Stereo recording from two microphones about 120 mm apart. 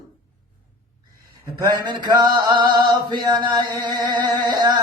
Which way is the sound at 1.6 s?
35° right (ahead or behind).